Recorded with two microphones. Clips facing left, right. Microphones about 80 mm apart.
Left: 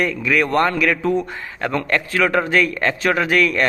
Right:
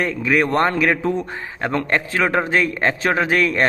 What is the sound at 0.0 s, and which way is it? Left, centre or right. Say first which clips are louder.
A man's voice: even; right.